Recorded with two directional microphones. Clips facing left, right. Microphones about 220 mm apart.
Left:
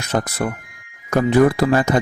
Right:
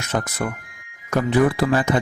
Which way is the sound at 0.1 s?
35° left (ahead or behind).